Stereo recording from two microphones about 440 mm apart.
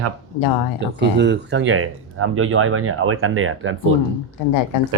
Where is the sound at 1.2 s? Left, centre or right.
Right.